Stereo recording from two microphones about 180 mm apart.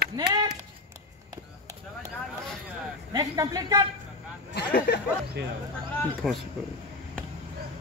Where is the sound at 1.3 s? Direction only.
20° right (ahead or behind).